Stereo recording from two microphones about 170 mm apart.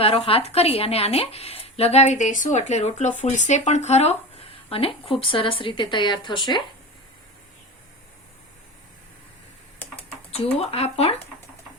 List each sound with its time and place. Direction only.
0.0 s speech: 35° left (ahead or behind)
10.3 s speech: 35° left (ahead or behind)